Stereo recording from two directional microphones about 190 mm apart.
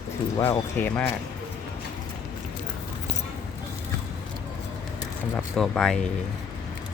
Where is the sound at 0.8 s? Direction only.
10° left (ahead or behind).